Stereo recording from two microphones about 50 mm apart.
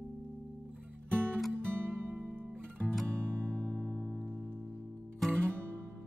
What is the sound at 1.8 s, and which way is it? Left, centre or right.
Music, right.